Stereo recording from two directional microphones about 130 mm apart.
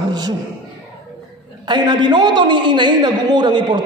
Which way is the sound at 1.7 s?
35° right (ahead or behind).